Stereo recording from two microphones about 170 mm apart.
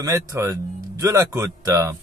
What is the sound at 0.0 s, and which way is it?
Speech, 20° right (ahead or behind).